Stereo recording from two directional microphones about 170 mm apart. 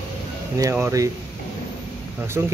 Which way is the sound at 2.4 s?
10° right (ahead or behind).